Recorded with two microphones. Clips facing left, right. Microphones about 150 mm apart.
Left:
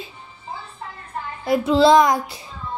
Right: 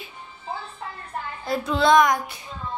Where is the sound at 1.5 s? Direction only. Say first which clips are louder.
Left 4 dB; 25° left (ahead or behind).